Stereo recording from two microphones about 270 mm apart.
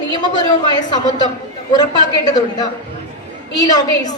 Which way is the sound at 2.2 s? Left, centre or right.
Centre.